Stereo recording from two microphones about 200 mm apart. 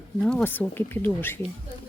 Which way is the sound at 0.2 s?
5° left (ahead or behind).